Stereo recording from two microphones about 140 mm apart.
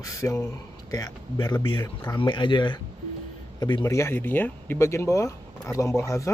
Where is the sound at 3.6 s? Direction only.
20° left (ahead or behind).